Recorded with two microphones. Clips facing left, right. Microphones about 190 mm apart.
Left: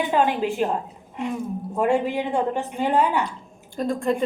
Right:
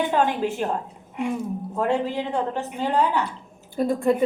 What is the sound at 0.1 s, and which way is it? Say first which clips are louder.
Speech: left 1 dB; 5° left (ahead or behind).